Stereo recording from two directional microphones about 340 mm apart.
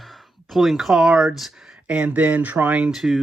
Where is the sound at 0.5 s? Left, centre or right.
Centre.